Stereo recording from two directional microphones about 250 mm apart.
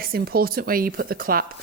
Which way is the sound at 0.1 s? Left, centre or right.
Right.